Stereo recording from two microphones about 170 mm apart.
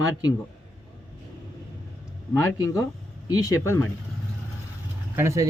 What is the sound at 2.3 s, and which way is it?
Speech, 15° left (ahead or behind).